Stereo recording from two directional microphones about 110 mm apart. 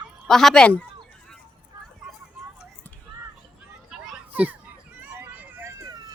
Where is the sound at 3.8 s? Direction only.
5° right (ahead or behind); by 5.9 s 25° right (ahead or behind).